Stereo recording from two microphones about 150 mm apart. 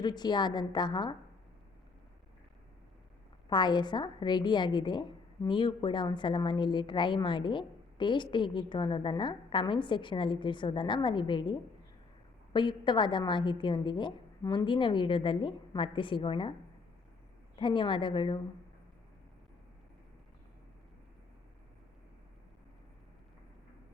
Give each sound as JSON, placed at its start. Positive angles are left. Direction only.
{"t": 0.0, "sound": "a woman's voice", "side_deg": 30}
{"t": 3.5, "sound": "a woman's voice", "side_deg": 30}
{"t": 17.6, "sound": "a woman's voice", "side_deg": 35}